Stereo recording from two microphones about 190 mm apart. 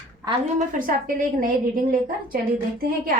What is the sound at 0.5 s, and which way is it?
Speech, 45° right (ahead or behind).